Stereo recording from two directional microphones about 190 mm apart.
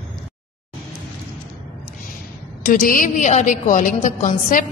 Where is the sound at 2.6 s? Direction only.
45° left (ahead or behind).